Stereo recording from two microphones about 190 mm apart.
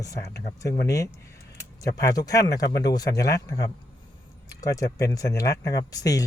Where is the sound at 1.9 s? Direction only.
20° left (ahead or behind).